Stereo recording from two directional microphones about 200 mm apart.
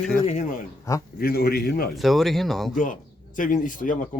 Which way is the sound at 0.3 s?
35° left (ahead or behind).